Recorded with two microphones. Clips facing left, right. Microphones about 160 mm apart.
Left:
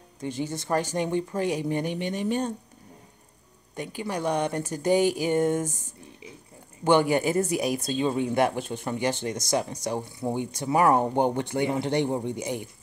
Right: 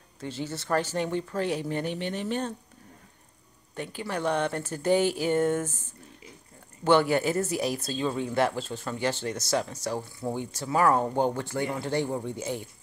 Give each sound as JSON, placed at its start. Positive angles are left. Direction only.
{"t": 0.2, "sound": "speech", "side_deg": 15}
{"t": 3.7, "sound": "speech", "side_deg": 15}